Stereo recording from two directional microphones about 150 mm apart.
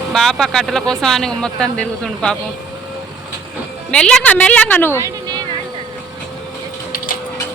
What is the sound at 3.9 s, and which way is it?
A woman's voice, 5° left (ahead or behind).